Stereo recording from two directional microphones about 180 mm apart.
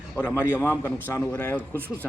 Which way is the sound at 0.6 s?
10° left (ahead or behind).